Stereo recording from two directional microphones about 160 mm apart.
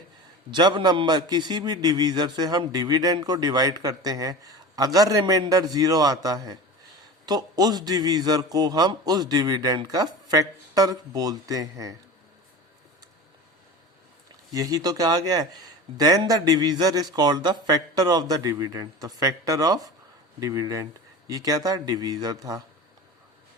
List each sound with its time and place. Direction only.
0.5 s a man's voice: 25° right (ahead or behind)
14.5 s a man's voice: 25° right (ahead or behind)